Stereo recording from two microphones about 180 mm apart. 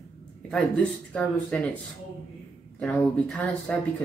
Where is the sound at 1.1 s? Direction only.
5° left (ahead or behind).